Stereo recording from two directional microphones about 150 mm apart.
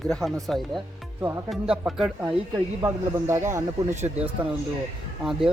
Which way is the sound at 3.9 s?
50° right (ahead or behind).